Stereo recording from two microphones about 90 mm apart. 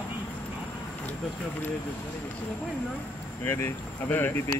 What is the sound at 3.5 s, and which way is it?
Speech, 25° left (ahead or behind).